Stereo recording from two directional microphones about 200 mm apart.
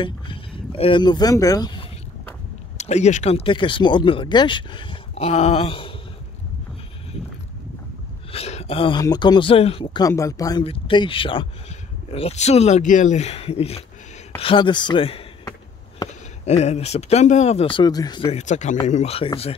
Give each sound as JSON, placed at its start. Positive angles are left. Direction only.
{"t": 0.0, "sound": "speech", "side_deg": 25}
{"t": 2.8, "sound": "speech", "side_deg": 35}
{"t": 8.3, "sound": "speech", "side_deg": 30}
{"t": 10.0, "sound": "speech", "side_deg": 15}